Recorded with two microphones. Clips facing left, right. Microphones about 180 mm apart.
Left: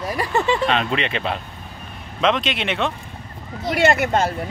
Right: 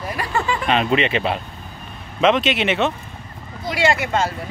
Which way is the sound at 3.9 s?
55° left (ahead or behind).